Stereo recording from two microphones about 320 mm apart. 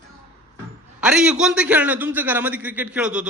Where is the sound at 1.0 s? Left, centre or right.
Centre.